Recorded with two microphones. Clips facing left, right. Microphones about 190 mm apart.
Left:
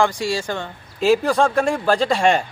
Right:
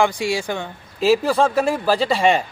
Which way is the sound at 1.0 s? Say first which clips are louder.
Even; centre (ahead or behind).